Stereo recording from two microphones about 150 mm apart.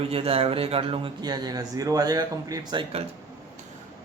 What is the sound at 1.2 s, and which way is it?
Speech, 25° right (ahead or behind).